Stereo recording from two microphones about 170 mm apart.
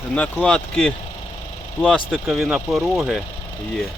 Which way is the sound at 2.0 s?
Centre (ahead or behind).